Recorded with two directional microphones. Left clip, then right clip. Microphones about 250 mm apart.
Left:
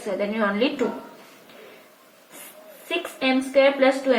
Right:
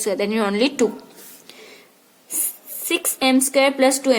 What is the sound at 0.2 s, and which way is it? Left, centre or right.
Speech, right.